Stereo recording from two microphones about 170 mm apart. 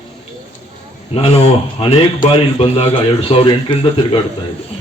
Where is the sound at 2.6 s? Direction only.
35° left (ahead or behind).